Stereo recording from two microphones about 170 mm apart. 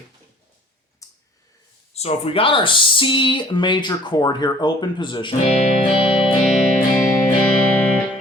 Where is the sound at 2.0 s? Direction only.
35° left (ahead or behind).